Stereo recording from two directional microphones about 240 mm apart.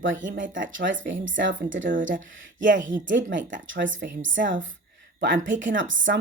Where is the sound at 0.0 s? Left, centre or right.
Right.